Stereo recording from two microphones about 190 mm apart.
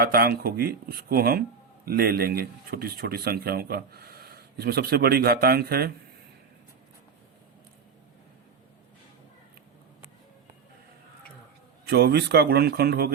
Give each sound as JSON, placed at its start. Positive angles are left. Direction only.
{"t": 0.0, "sound": "speech", "side_deg": -55}
{"t": 11.9, "sound": "speech", "side_deg": -60}